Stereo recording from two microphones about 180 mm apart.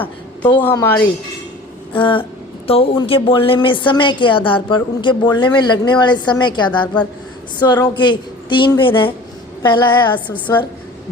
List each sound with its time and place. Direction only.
0.6 s a woman's voice: 15° left (ahead or behind)
1.9 s a sound: 30° left (ahead or behind)
2.6 s a woman's voice: 30° left (ahead or behind)